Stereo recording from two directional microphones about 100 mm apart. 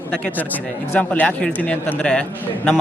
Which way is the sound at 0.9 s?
15° left (ahead or behind).